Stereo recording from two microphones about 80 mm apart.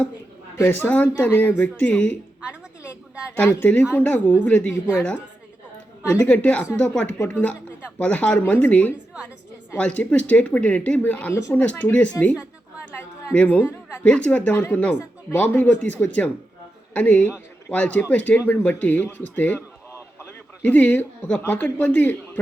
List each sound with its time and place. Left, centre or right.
0.5 s a man's voice: left
0.9 s speech: centre
3.7 s speech: left
6.1 s a man's voice: centre
13.3 s a man's voice: centre